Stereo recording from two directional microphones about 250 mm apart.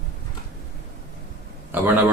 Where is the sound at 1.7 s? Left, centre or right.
Centre.